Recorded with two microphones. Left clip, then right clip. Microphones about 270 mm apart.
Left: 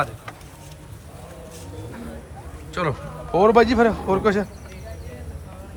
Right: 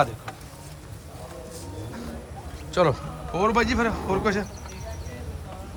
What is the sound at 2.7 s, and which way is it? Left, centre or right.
Speech, centre.